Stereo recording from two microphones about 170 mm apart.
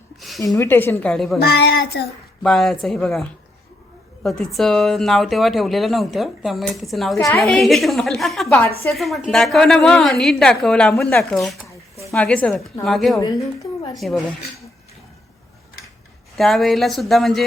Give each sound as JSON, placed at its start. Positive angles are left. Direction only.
{"t": 0.2, "sound": "a sound", "side_deg": 0}
{"t": 0.6, "sound": "a woman's voice", "side_deg": 15}
{"t": 1.4, "sound": "a child's voice", "side_deg": 75}
{"t": 2.4, "sound": "a woman's voice", "side_deg": 0}
{"t": 13.1, "sound": "a woman's voice", "side_deg": 20}
{"t": 13.9, "sound": "a woman's voice", "side_deg": 0}
{"t": 16.4, "sound": "a woman's voice", "side_deg": 0}